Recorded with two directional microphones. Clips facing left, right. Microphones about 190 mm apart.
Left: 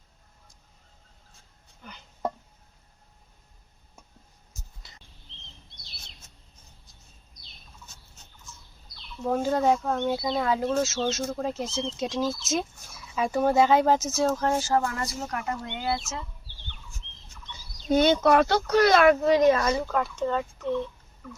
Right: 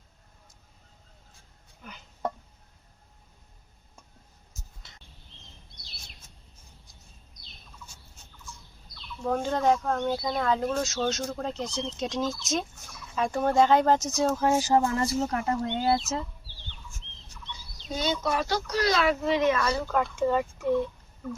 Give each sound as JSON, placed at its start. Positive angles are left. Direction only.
{"t": 1.8, "sound": "speech", "side_deg": 0}
{"t": 9.2, "sound": "speech", "side_deg": 5}
{"t": 14.7, "sound": "speech", "side_deg": -20}
{"t": 17.4, "sound": "speech", "side_deg": 45}
{"t": 20.1, "sound": "speech", "side_deg": -10}